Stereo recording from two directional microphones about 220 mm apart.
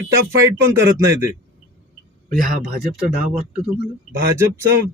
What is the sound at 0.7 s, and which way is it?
Speech, 10° right (ahead or behind).